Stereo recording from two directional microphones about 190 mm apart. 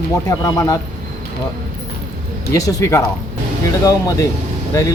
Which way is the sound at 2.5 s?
20° left (ahead or behind).